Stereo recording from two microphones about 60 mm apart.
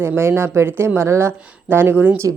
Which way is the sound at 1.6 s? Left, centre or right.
Right.